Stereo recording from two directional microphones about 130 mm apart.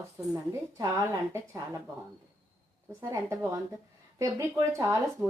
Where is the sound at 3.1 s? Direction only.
25° right (ahead or behind).